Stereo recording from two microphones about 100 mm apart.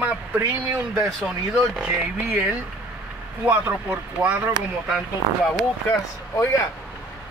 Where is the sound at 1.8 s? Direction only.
15° right (ahead or behind).